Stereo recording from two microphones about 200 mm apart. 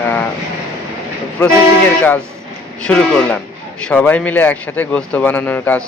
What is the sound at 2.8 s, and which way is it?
Speech, 5° left (ahead or behind).